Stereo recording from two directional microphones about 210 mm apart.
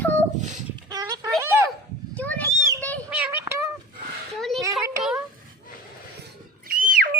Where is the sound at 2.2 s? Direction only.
5° left (ahead or behind).